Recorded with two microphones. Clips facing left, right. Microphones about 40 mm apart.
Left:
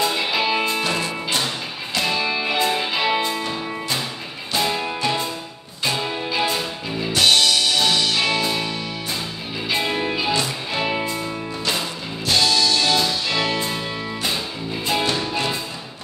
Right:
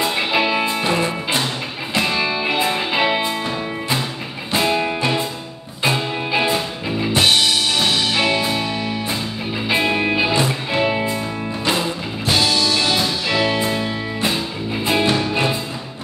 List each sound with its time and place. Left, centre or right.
0.0 s music: right
0.5 s music: centre
0.8 s music: right
4.5 s music: right
9.7 s music: right
12.3 s music: centre